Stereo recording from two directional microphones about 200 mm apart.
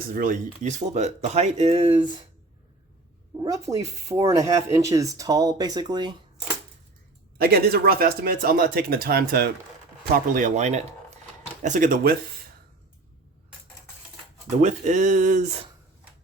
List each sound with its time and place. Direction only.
0.1 s speech: 45° right (ahead or behind); by 2.0 s 30° right (ahead or behind)
3.4 s speech: 15° right (ahead or behind)
7.3 s speech: 50° right (ahead or behind)
10.3 s speech: 40° right (ahead or behind)
14.6 s speech: 35° right (ahead or behind)